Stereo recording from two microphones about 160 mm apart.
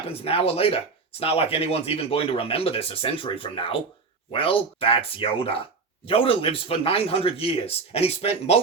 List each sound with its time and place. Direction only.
0.1 s speech: 40° left (ahead or behind)